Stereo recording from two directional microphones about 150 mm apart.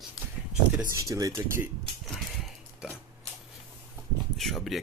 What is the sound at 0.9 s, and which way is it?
Speech, 25° right (ahead or behind).